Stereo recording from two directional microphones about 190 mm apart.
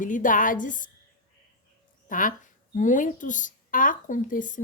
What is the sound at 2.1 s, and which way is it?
A woman's voice, 45° left (ahead or behind).